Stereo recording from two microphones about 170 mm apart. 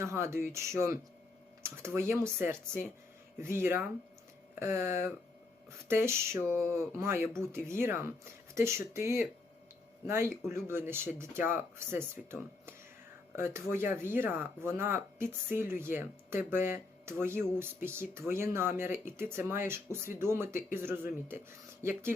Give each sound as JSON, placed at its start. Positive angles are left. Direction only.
{"t": 0.0, "sound": "speech", "side_deg": -15}